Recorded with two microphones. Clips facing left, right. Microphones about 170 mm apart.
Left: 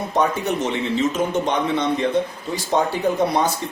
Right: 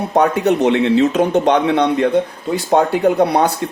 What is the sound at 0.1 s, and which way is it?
Speech, 65° right (ahead or behind).